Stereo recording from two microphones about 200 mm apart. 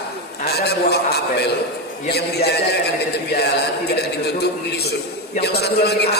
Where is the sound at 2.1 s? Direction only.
55° left (ahead or behind).